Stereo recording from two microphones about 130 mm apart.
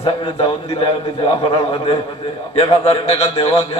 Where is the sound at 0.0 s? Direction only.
40° left (ahead or behind).